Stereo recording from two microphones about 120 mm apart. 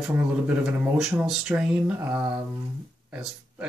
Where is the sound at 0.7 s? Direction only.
5° right (ahead or behind).